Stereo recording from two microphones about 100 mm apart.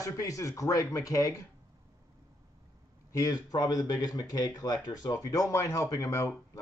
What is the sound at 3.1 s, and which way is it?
Speech, 40° left (ahead or behind).